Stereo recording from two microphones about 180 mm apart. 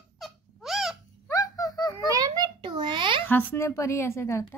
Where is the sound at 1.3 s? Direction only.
20° left (ahead or behind).